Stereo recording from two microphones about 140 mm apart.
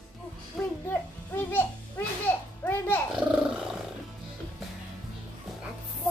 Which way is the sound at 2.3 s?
15° left (ahead or behind).